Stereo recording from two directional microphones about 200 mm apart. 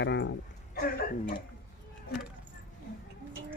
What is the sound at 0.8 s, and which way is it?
Speech, 50° left (ahead or behind).